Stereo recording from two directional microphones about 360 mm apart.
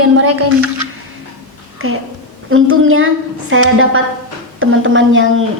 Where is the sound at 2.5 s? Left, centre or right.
Right.